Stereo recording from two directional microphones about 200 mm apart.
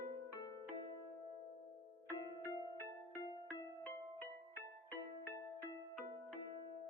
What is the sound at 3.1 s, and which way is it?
Music, 20° left (ahead or behind).